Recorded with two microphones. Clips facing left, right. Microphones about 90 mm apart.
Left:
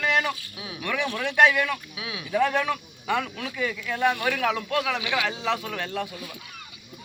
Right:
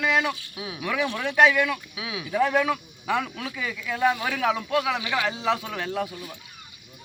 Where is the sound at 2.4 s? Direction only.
10° right (ahead or behind).